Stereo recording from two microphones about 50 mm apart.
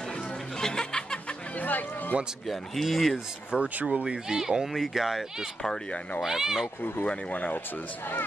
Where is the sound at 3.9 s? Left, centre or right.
Right.